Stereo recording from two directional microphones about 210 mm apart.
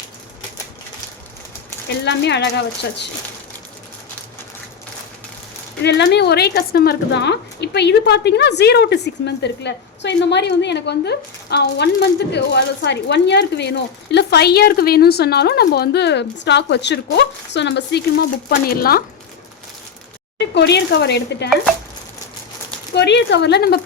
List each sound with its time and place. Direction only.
2.0 s speech: 55° left (ahead or behind)
5.8 s a woman's voice: 55° left (ahead or behind)
20.5 s a woman's voice: 55° left (ahead or behind)
21.5 s chopping: centre (ahead or behind)
23.0 s a woman's voice: 55° left (ahead or behind)